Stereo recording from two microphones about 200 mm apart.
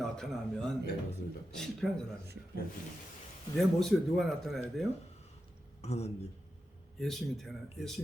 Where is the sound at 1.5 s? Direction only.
5° left (ahead or behind).